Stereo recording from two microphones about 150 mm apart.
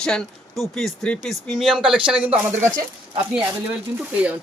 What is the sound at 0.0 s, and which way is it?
Speech, 5° left (ahead or behind).